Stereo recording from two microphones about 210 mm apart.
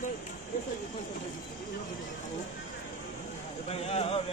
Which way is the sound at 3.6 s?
30° left (ahead or behind).